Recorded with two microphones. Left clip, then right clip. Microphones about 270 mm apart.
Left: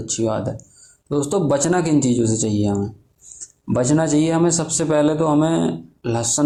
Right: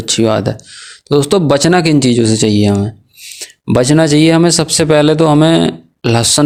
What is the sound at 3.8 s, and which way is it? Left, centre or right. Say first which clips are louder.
A man's voice: right 8 dB; right.